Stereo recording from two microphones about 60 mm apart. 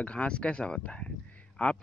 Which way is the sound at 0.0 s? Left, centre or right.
Centre.